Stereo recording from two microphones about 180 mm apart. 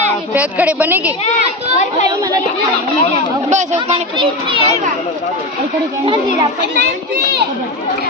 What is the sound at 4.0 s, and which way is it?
Speech, 30° right (ahead or behind).